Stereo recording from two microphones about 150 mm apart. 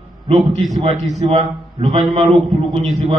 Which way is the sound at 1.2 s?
40° right (ahead or behind).